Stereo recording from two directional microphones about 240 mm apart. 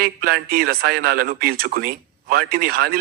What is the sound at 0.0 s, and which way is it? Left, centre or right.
A man's voice, right.